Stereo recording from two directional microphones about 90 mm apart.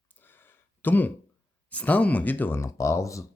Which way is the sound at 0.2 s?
25° left (ahead or behind).